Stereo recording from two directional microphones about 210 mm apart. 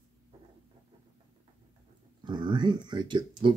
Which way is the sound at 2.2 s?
20° right (ahead or behind).